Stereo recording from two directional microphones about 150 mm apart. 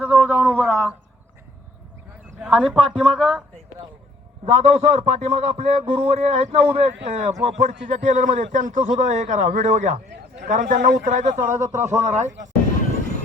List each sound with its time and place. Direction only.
0.0 s a sound: 5° left (ahead or behind)
2.4 s speech: centre (ahead or behind)
4.4 s a man's voice: 45° right (ahead or behind)